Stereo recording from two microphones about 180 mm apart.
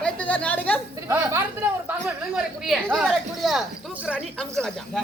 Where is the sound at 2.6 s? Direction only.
5° right (ahead or behind).